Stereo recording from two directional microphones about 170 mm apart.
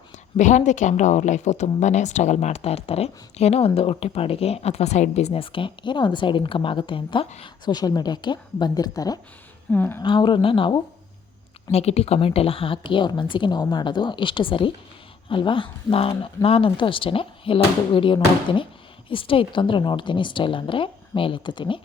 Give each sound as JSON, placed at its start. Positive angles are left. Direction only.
{"t": 0.3, "sound": "speech", "side_deg": 45}
{"t": 9.7, "sound": "speech", "side_deg": 10}
{"t": 10.0, "sound": "speech", "side_deg": 30}